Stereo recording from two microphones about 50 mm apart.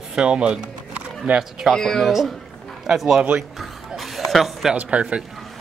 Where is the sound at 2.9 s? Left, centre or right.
Centre.